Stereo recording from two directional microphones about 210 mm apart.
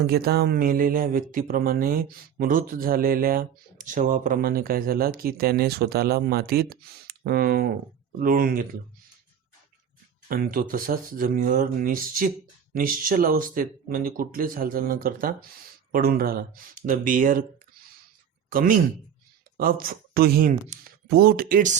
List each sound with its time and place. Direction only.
0.0 s speech: 45° right (ahead or behind)
10.2 s speech: 45° right (ahead or behind)
18.5 s speech: 40° right (ahead or behind)